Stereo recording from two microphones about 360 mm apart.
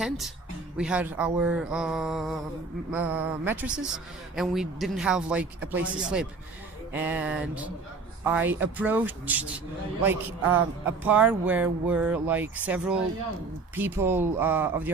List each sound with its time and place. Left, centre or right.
0.8 s a man's voice: centre
10.8 s a man's voice: centre